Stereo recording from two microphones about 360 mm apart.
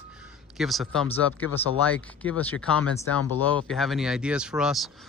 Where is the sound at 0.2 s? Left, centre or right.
Centre.